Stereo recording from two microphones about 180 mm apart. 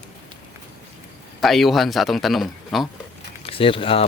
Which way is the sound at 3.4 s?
30° left (ahead or behind).